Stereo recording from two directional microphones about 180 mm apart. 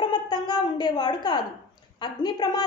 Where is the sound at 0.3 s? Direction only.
25° left (ahead or behind).